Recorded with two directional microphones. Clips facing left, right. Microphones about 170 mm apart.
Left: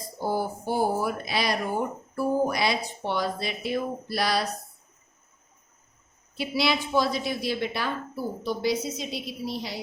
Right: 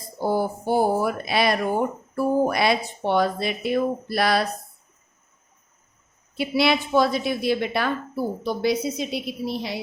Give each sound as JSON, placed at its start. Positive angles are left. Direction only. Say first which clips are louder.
{"t": 0.3, "sound": "a woman's voice", "louder": "right 5 dB", "side_deg": -60}
{"t": 6.3, "sound": "a woman's voice", "louder": "right 5 dB", "side_deg": -60}